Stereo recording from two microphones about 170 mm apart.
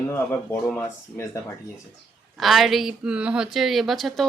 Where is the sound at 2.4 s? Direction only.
Centre (ahead or behind).